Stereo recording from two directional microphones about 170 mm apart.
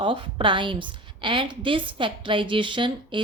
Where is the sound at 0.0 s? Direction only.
30° right (ahead or behind).